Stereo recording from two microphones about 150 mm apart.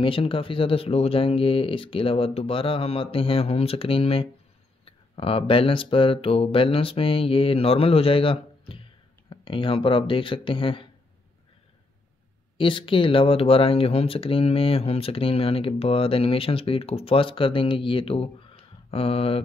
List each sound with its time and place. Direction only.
0.0 s speech: 35° left (ahead or behind)
12.5 s speech: 35° left (ahead or behind)